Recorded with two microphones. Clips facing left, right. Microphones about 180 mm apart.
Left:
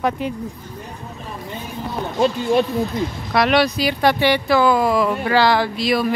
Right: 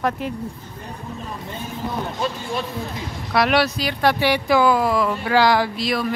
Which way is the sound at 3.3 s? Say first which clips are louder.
Left 2 dB; 5° right (ahead or behind).